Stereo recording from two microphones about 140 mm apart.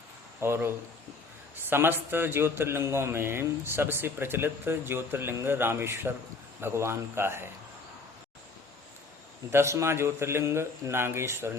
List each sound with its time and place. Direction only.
0.3 s a man's voice: 15° right (ahead or behind)
9.5 s speech: 20° right (ahead or behind)